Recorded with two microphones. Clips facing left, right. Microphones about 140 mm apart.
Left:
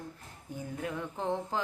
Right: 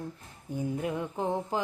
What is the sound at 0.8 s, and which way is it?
Music, 15° right (ahead or behind).